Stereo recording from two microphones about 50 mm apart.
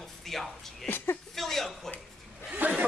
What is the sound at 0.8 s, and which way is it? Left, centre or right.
Speech, left.